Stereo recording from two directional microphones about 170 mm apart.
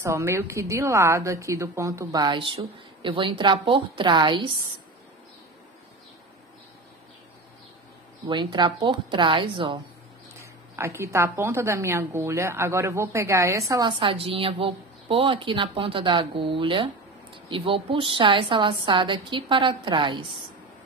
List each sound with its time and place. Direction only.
0.0 s a woman's voice: 15° right (ahead or behind)
8.3 s a woman's voice: 25° right (ahead or behind)
10.4 s a woman's voice: 15° right (ahead or behind)